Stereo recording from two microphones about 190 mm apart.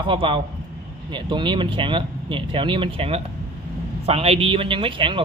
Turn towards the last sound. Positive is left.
turn(degrees=-25)  # may be behind; listen again after turning